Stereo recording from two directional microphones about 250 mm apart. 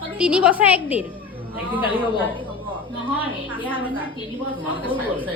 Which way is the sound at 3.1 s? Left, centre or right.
Centre.